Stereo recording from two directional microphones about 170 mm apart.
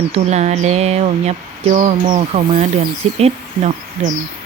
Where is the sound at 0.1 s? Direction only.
40° right (ahead or behind).